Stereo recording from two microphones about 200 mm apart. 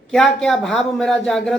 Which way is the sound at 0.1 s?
Centre (ahead or behind).